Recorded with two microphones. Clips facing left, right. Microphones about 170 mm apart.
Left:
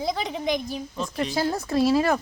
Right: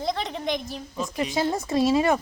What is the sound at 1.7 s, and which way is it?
Speech, 20° right (ahead or behind).